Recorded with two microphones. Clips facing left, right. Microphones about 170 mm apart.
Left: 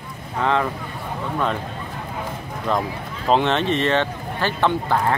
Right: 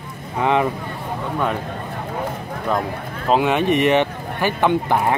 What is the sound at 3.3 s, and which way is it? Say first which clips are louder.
Speech: right 2 dB; 10° right (ahead or behind).